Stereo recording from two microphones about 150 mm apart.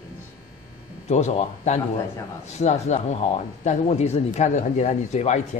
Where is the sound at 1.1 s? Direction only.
50° left (ahead or behind).